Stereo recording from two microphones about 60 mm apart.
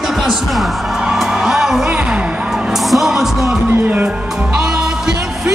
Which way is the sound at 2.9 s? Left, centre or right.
Centre.